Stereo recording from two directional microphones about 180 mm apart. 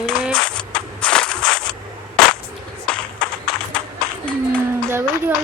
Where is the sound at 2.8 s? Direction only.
5° left (ahead or behind).